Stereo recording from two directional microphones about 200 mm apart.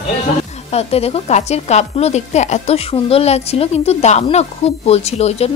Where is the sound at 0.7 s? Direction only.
30° left (ahead or behind).